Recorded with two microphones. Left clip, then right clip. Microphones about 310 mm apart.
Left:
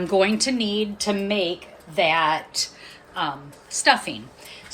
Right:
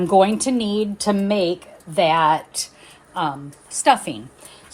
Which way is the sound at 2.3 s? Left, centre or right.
Centre.